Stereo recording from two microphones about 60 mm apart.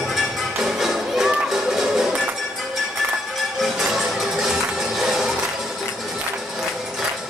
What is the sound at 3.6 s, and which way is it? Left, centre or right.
Music, centre.